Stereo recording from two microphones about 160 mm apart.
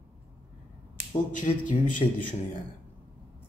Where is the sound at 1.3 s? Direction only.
55° left (ahead or behind).